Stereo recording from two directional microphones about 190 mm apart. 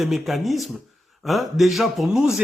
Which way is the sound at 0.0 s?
Centre (ahead or behind).